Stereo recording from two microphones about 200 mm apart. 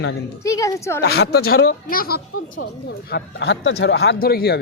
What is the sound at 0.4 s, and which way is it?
Speech, 15° left (ahead or behind).